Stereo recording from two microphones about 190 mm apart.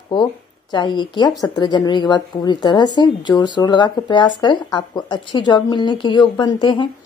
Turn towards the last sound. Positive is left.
turn(degrees=25)  # may be behind; listen again after turning